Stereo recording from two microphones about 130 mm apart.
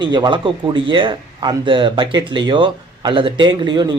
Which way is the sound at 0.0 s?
35° right (ahead or behind).